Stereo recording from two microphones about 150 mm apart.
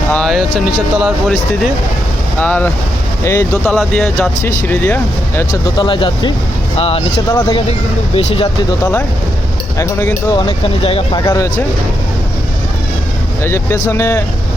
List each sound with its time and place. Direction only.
0.1 s speech: 5° left (ahead or behind)
2.4 s speech: 10° left (ahead or behind)
3.8 s speech: 5° left (ahead or behind)
4.4 s speech: 15° left (ahead or behind)
5.7 s speech: 35° left (ahead or behind)
8.8 s speech: 15° left (ahead or behind)
10.3 s speech: 35° left (ahead or behind)
11.2 s speech: 20° left (ahead or behind)
13.4 s speech: 15° left (ahead or behind)